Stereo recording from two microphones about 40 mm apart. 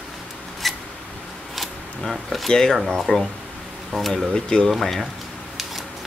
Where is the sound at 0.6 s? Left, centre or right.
Centre.